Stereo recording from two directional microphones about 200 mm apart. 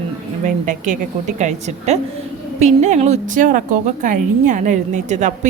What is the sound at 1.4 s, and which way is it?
A woman's voice, 35° right (ahead or behind).